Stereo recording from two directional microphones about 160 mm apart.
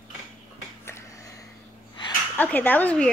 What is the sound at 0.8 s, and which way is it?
Finger snapping, 15° left (ahead or behind).